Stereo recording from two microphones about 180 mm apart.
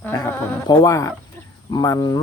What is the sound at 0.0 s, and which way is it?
A man's voice, 10° left (ahead or behind).